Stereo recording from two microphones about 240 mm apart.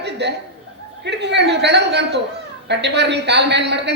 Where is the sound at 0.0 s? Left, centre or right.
Right.